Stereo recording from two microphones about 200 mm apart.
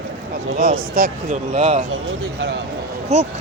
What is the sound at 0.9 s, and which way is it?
Speech, 50° right (ahead or behind).